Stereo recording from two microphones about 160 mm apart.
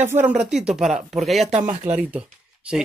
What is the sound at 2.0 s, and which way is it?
Speech, 10° right (ahead or behind).